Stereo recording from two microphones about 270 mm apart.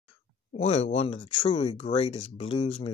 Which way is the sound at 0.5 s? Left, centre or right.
Left.